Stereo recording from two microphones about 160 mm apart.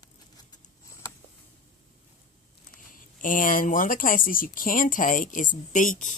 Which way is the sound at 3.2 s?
55° left (ahead or behind).